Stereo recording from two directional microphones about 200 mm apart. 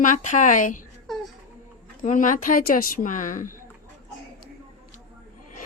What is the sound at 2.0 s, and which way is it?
Speech, 40° left (ahead or behind).